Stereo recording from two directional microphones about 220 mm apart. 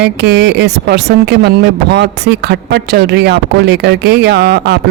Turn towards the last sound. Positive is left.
turn(degrees=-45)  # may be behind; listen again after turning